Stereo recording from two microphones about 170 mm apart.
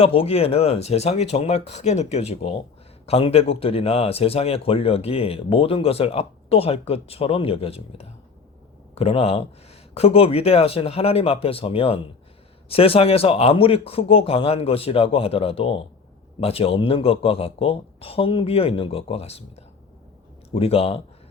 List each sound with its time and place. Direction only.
0.0 s speech: 35° left (ahead or behind)